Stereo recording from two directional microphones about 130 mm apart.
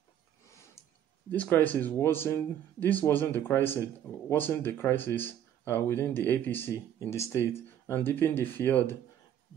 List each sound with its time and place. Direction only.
1.3 s speech: 10° left (ahead or behind)